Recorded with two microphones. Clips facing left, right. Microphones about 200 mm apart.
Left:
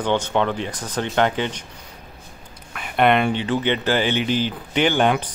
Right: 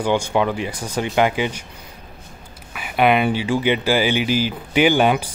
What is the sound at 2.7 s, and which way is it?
A man's voice, 5° right (ahead or behind).